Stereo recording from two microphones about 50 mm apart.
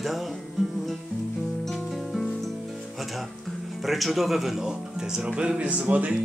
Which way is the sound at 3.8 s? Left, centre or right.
Centre.